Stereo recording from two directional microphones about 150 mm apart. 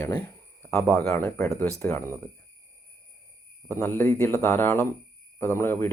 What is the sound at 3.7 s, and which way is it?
Speech, 15° left (ahead or behind).